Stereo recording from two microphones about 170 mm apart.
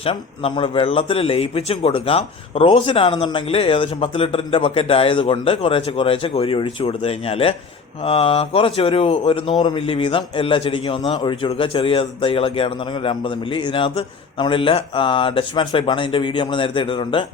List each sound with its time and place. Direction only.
0.0 s a man's voice: 30° left (ahead or behind)